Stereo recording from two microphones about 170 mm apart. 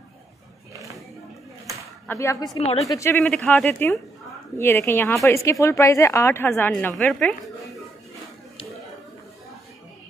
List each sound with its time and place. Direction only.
2.0 s speech: 15° left (ahead or behind)